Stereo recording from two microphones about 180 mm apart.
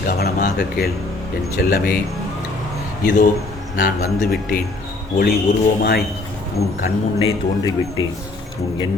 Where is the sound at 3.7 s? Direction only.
55° left (ahead or behind).